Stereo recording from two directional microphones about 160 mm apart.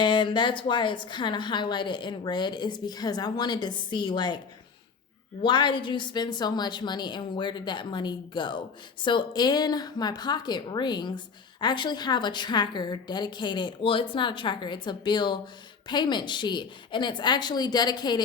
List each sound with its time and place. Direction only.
0.0 s a woman's voice: 30° left (ahead or behind)
5.4 s a woman's voice: 30° left (ahead or behind)